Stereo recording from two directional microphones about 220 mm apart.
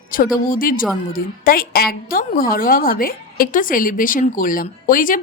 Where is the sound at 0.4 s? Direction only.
40° left (ahead or behind).